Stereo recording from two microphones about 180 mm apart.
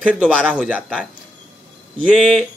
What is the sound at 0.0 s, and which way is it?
Speech, 5° right (ahead or behind).